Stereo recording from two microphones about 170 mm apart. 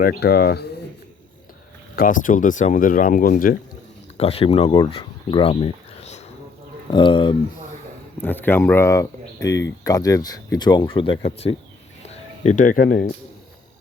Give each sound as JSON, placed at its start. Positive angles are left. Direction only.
{"t": 0.0, "sound": "speech", "side_deg": 65}
{"t": 2.0, "sound": "speech", "side_deg": 50}
{"t": 4.2, "sound": "speech", "side_deg": 35}
{"t": 4.9, "sound": "a sound", "side_deg": 35}
{"t": 6.9, "sound": "speech", "side_deg": 30}
{"t": 8.2, "sound": "speech", "side_deg": 10}
{"t": 12.0, "sound": "a sound", "side_deg": 40}